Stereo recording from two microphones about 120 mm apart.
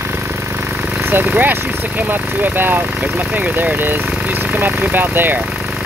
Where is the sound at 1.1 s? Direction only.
15° right (ahead or behind).